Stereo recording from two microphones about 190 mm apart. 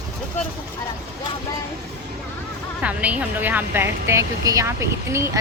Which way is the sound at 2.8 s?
5° right (ahead or behind).